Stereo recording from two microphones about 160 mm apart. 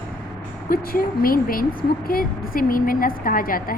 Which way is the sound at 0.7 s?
65° left (ahead or behind).